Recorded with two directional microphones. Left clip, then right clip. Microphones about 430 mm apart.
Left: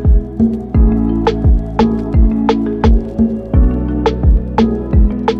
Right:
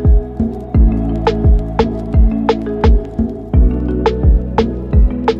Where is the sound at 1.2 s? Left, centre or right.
Centre.